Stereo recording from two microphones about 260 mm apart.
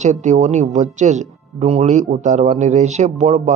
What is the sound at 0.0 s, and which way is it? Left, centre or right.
Speech, right.